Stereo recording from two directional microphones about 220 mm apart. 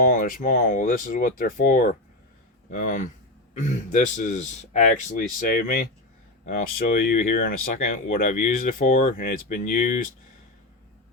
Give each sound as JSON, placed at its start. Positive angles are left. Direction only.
{"t": 0.0, "sound": "speech", "side_deg": 40}